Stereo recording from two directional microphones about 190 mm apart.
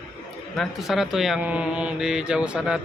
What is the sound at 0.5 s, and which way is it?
Speech, centre (ahead or behind).